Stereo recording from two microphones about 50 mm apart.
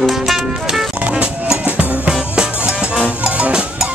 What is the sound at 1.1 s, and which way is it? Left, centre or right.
Music, right.